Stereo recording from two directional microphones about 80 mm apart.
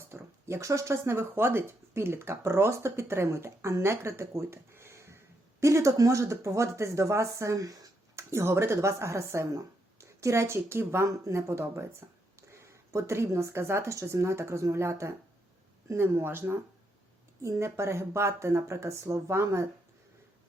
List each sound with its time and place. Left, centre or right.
0.1 s speech: right
8.1 s speech: right